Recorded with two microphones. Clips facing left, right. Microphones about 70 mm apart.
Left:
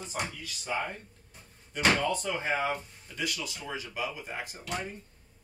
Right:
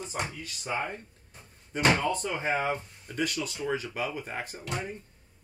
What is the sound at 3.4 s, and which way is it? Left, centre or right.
Speech, right.